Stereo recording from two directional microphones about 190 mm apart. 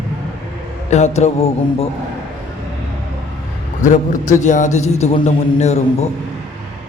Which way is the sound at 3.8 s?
40° left (ahead or behind).